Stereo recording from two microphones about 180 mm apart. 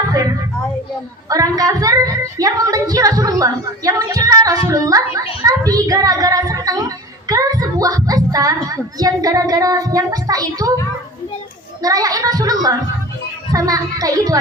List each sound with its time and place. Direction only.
0.1 s a sound: 20° right (ahead or behind)
1.3 s a woman's voice: 20° right (ahead or behind)
11.8 s a woman's voice: 20° right (ahead or behind)